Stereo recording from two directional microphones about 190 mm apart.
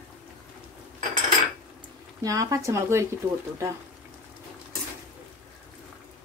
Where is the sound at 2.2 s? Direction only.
20° right (ahead or behind).